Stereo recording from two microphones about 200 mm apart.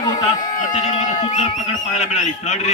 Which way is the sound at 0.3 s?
40° left (ahead or behind).